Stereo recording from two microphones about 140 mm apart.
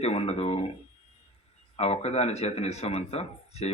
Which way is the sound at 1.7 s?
45° left (ahead or behind).